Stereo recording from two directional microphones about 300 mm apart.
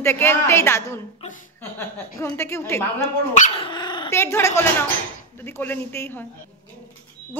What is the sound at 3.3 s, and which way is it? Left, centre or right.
A woman's voice, left.